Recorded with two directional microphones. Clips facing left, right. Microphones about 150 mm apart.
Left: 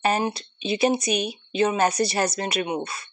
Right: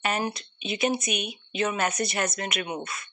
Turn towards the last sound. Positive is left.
turn(degrees=30)  # may be behind; listen again after turning